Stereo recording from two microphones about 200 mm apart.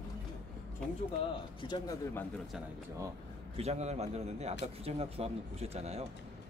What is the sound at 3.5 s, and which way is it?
Speech, 30° right (ahead or behind).